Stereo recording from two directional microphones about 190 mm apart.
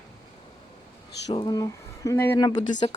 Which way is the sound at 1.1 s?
65° left (ahead or behind).